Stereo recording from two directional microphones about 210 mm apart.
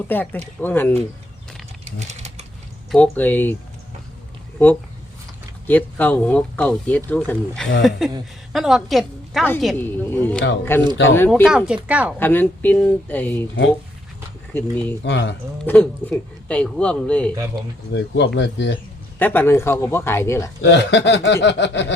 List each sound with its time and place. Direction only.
0.1 s speech: 10° left (ahead or behind)
1.8 s a sound: 30° right (ahead or behind)
2.9 s speech: 5° left (ahead or behind)
5.6 s a woman's voice: 10° left (ahead or behind)
11.4 s a woman's voice: 5° right (ahead or behind)
12.2 s speech: 10° left (ahead or behind)
14.5 s speech: 10° left (ahead or behind)
15.0 s speech: 55° left (ahead or behind)
15.6 s a woman's voice: 5° left (ahead or behind)
17.9 s speech: 55° left (ahead or behind)
19.2 s speech: 10° left (ahead or behind)
20.6 s speech: 55° left (ahead or behind)